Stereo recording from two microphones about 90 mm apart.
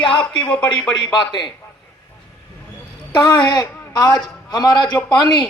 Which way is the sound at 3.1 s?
55° left (ahead or behind).